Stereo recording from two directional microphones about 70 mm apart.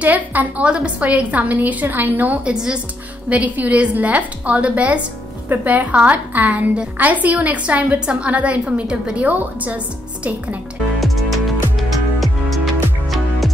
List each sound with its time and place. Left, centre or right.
0.0 s a woman's voice: right
11.0 s music: centre